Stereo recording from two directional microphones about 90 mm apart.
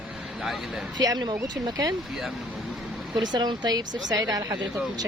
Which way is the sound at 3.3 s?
55° right (ahead or behind).